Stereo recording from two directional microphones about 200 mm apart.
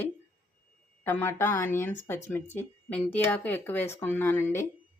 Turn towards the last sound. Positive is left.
turn(degrees=10)  # may be behind; listen again after turning